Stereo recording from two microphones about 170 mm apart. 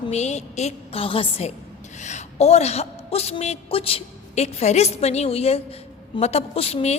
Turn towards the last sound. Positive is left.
turn(degrees=35)  # may be behind; listen again after turning